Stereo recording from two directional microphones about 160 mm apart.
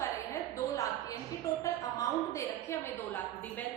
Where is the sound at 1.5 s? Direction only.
20° left (ahead or behind).